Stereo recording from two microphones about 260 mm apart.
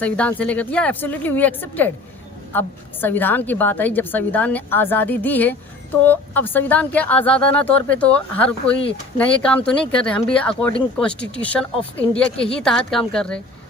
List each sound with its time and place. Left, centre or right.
0.0 s a woman's voice: centre
8.7 s speech: left
9.1 s speech: centre